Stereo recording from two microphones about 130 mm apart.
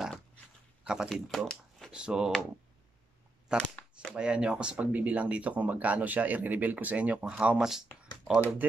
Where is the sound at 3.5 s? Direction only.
5° right (ahead or behind).